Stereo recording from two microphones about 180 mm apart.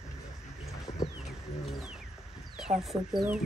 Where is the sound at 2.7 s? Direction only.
40° right (ahead or behind).